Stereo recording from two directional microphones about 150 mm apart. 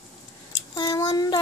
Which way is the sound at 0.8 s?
25° left (ahead or behind).